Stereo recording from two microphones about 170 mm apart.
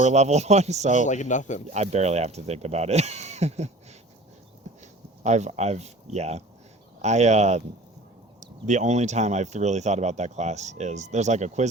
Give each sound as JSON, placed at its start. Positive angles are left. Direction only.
{"t": 0.0, "sound": "speech", "side_deg": -40}
{"t": 1.0, "sound": "speech", "side_deg": 45}
{"t": 1.7, "sound": "speech", "side_deg": -40}
{"t": 5.2, "sound": "speech", "side_deg": -40}